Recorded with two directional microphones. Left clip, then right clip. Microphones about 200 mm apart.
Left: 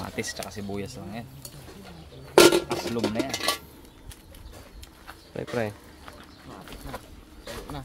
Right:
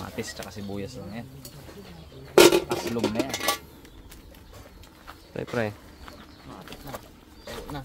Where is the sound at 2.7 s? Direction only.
10° left (ahead or behind).